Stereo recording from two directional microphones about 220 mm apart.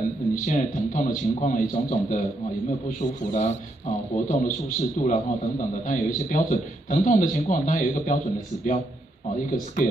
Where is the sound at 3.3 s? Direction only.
35° left (ahead or behind).